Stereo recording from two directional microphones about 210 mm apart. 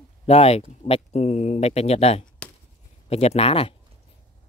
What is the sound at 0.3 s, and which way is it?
Speech, 30° left (ahead or behind).